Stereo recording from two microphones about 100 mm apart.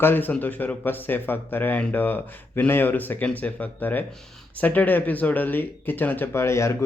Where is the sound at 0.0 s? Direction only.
20° left (ahead or behind).